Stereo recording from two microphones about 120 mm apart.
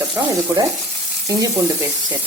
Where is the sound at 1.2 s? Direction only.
30° right (ahead or behind).